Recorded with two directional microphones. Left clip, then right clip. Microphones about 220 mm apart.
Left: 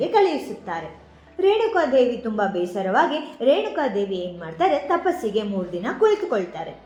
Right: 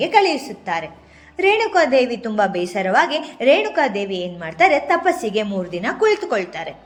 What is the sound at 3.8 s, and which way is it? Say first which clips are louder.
A woman's voice: right 3 dB; 30° right (ahead or behind).